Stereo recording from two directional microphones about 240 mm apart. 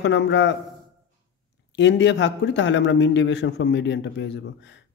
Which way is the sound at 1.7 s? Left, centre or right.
Left.